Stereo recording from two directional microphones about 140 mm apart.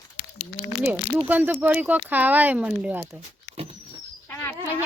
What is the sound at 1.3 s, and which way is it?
Speech, 10° right (ahead or behind).